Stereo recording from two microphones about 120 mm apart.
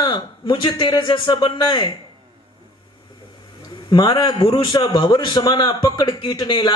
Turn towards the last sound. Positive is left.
turn(degrees=40)  # may be behind; listen again after turning